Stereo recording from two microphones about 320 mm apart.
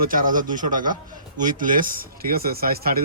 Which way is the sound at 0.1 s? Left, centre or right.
Right.